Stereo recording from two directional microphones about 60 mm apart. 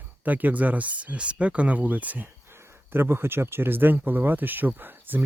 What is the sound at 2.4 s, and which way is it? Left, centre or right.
Speech, right.